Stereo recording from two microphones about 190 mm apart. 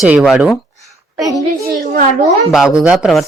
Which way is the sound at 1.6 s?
40° right (ahead or behind).